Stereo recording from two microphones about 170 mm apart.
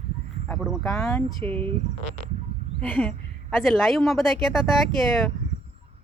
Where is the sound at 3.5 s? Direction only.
Centre (ahead or behind).